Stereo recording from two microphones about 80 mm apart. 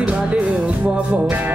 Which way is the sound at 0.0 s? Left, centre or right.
Centre.